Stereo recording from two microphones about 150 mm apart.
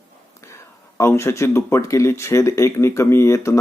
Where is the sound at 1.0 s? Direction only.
20° left (ahead or behind).